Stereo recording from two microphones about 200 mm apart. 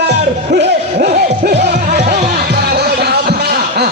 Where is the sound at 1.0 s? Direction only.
50° right (ahead or behind).